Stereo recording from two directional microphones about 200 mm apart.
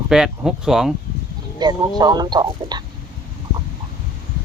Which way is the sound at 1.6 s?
20° right (ahead or behind).